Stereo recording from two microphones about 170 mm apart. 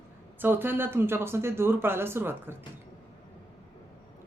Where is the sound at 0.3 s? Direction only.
10° right (ahead or behind).